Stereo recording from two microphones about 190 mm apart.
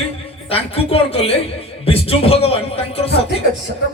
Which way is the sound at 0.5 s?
30° left (ahead or behind).